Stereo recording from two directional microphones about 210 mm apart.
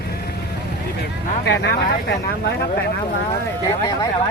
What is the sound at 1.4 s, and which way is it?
Speech, 55° left (ahead or behind).